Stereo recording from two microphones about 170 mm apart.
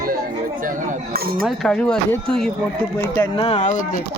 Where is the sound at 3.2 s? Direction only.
30° left (ahead or behind).